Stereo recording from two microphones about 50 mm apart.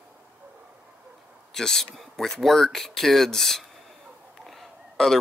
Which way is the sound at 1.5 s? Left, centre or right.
Centre.